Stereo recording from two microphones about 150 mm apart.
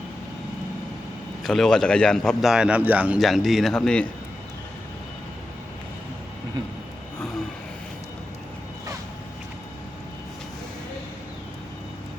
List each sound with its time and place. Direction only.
1.5 s a man's voice: centre (ahead or behind)